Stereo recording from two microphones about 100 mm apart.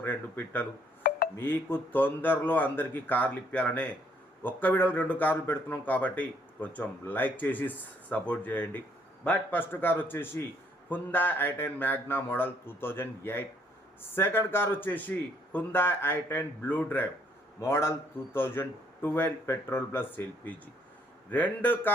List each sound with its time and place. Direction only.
0.0 s speech: 20° left (ahead or behind)